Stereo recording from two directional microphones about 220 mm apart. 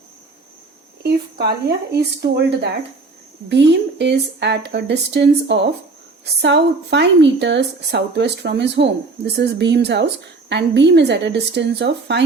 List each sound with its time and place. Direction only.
1.0 s a woman's voice: 45° right (ahead or behind)